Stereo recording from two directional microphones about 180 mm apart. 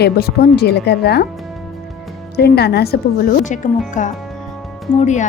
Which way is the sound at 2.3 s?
60° left (ahead or behind).